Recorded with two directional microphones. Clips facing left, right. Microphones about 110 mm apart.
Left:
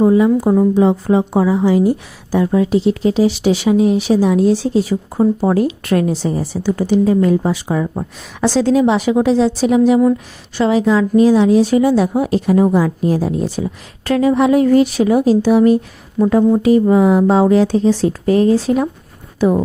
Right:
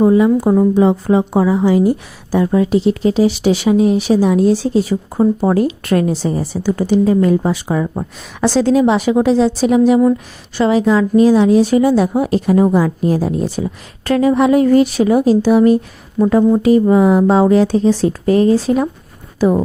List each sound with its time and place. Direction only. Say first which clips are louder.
0.0 s a woman's voice: right 1 dB; 55° right (ahead or behind); by 8.4 s 35° right (ahead or behind)
8.4 s a woman's voice: right 1 dB; 50° right (ahead or behind); by 19.6 s 35° right (ahead or behind)